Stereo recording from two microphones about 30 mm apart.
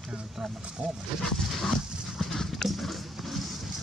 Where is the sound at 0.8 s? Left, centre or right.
Right.